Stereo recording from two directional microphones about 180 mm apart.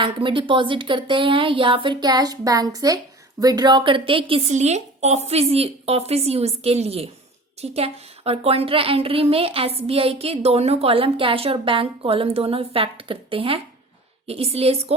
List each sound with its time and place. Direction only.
0.0 s a woman's voice: 30° right (ahead or behind)